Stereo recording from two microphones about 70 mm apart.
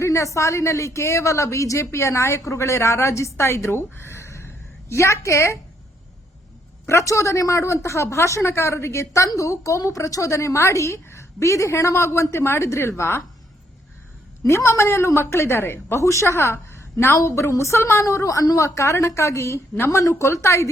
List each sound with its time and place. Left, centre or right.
0.0 s a woman's voice: left
6.8 s a woman's voice: left
14.4 s a woman's voice: left